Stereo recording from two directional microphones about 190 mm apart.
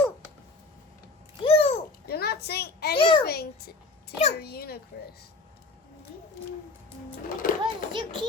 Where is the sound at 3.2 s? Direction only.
55° left (ahead or behind).